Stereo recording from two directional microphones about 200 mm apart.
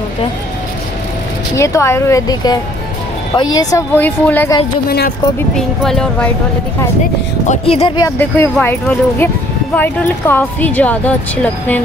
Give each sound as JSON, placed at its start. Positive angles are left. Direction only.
{"t": 1.6, "sound": "a woman's voice", "side_deg": 15}
{"t": 4.8, "sound": "speech", "side_deg": 50}
{"t": 5.8, "sound": "speech", "side_deg": 5}
{"t": 7.4, "sound": "speech", "side_deg": 30}
{"t": 8.0, "sound": "a woman's voice", "side_deg": 10}